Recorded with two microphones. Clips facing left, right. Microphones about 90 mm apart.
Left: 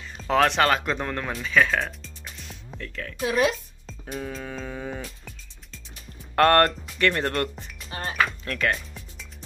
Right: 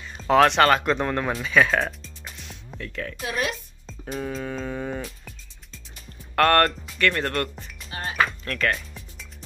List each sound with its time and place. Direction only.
0.2 s speech: centre (ahead or behind)
2.4 s music: centre (ahead or behind)
3.3 s speech: 25° left (ahead or behind)
3.8 s music: centre (ahead or behind)
6.3 s speech: 25° left (ahead or behind)
8.5 s speech: centre (ahead or behind)